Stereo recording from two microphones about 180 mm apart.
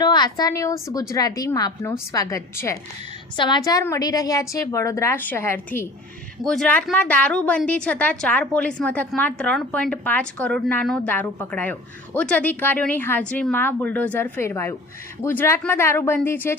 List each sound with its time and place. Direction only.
0.0 s a woman's voice: 25° left (ahead or behind)
6.4 s a woman's voice: 5° left (ahead or behind)